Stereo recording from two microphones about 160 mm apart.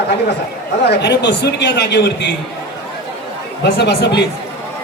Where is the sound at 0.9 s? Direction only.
90° left.